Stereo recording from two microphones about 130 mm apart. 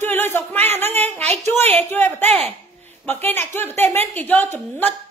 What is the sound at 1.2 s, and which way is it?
Speech, 55° right (ahead or behind).